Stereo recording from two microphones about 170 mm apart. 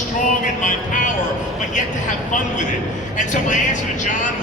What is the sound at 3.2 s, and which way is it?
Speech, 45° left (ahead or behind).